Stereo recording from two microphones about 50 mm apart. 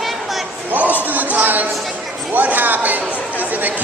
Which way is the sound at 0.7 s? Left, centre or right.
Right.